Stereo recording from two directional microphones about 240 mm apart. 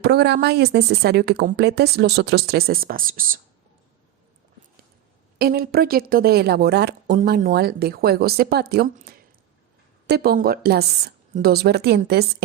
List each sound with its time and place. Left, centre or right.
0.0 s speech: right
5.4 s a woman's voice: right